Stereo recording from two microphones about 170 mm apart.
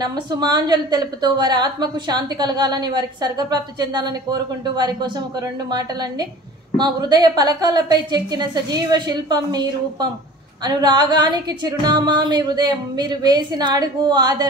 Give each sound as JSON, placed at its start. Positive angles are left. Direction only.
{"t": 0.0, "sound": "a woman's voice", "side_deg": -25}